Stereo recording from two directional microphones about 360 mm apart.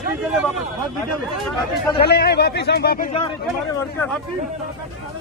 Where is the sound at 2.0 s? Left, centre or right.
Left.